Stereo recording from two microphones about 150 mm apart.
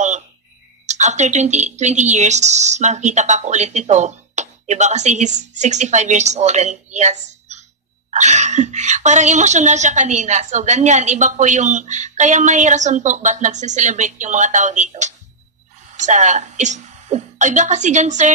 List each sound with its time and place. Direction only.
0.8 s speech: 50° right (ahead or behind)